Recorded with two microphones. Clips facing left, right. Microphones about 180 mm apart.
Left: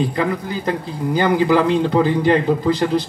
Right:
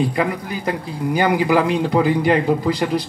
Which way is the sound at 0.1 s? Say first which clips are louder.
Left 1 dB; 15° right (ahead or behind).